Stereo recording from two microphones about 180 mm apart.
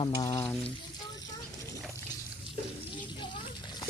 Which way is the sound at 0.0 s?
25° left (ahead or behind).